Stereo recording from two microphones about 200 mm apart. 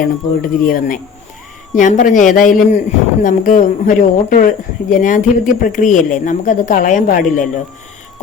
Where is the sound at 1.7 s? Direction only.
40° left (ahead or behind).